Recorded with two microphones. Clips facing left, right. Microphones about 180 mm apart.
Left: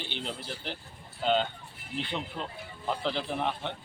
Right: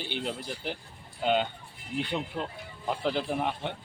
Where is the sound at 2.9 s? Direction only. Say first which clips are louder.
Right 2 dB; 10° right (ahead or behind).